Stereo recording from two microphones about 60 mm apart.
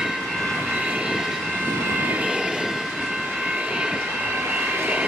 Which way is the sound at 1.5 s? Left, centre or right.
Right.